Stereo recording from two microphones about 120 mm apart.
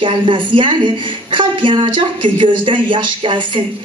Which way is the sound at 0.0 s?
45° right (ahead or behind).